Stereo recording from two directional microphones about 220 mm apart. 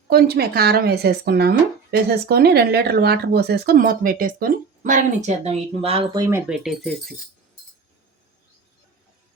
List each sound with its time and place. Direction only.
0.1 s speech: 45° right (ahead or behind); by 6.4 s 15° right (ahead or behind)
6.5 s speech: centre (ahead or behind)